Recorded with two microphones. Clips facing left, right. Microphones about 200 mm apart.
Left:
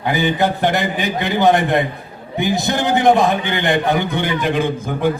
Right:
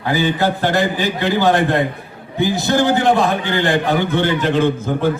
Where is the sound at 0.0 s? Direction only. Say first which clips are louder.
Even; 20° left (ahead or behind).